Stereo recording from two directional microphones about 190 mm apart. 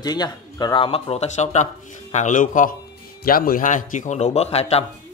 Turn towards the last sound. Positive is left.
turn(degrees=35)  # may be behind; listen again after turning